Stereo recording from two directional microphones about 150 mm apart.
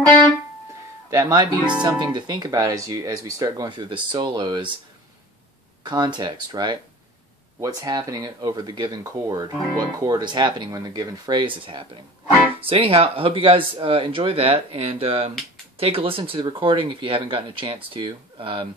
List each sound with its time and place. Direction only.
1.1 s speech: 25° right (ahead or behind)
5.9 s speech: 30° right (ahead or behind)